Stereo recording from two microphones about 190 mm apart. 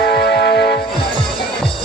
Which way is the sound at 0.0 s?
60° left (ahead or behind).